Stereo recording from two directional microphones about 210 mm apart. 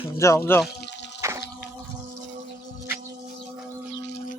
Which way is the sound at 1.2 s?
15° right (ahead or behind).